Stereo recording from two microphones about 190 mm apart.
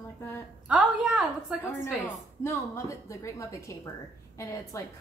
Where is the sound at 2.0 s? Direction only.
15° left (ahead or behind).